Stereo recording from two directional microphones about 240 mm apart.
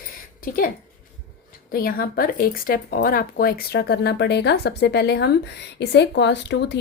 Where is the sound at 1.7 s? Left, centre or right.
Left.